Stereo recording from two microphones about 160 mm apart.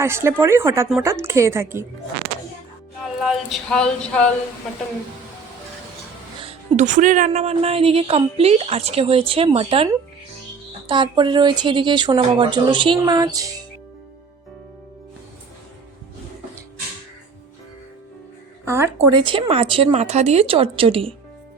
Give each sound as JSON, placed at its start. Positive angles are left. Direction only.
{"t": 0.0, "sound": "speech", "side_deg": -15}
{"t": 3.0, "sound": "speech", "side_deg": 0}
{"t": 6.4, "sound": "a woman's voice", "side_deg": -40}
{"t": 18.6, "sound": "speech", "side_deg": -15}
{"t": 19.1, "sound": "a woman's voice", "side_deg": -30}